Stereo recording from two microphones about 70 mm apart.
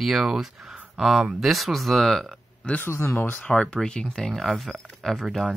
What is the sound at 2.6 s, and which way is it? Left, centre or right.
Speech, centre.